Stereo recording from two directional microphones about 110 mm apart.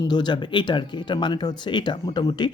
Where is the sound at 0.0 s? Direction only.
40° left (ahead or behind).